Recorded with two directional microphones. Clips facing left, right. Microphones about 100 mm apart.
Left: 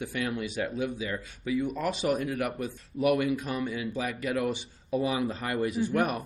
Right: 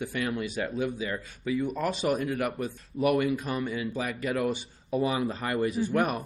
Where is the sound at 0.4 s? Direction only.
40° right (ahead or behind).